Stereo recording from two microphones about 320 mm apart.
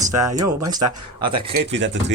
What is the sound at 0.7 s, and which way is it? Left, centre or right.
Speech, centre.